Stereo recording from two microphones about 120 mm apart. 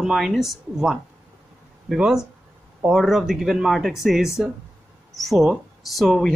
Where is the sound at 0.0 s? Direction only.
5° right (ahead or behind).